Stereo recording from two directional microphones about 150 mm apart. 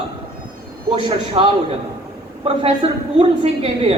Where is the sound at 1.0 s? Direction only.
35° right (ahead or behind).